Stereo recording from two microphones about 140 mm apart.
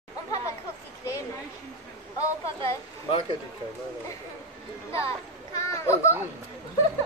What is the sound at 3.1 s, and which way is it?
Speech, 45° left (ahead or behind).